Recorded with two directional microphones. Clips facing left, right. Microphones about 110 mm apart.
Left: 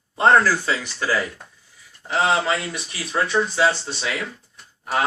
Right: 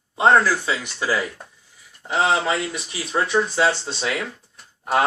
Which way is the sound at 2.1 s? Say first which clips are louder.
Even; 20° right (ahead or behind).